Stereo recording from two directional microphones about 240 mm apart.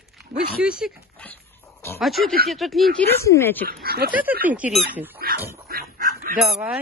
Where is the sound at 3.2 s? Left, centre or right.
Centre.